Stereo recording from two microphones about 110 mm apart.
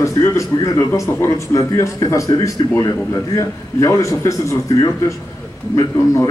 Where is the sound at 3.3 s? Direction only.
30° left (ahead or behind).